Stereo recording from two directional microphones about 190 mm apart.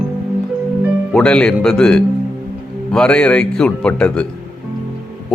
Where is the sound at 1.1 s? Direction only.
5° left (ahead or behind).